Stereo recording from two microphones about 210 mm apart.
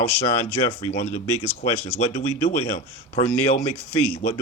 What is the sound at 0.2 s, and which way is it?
Speech, 25° left (ahead or behind).